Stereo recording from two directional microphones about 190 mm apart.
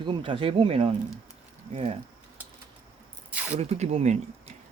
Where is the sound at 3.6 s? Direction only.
35° right (ahead or behind).